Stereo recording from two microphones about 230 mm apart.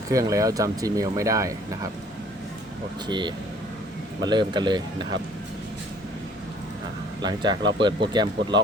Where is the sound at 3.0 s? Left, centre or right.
Centre.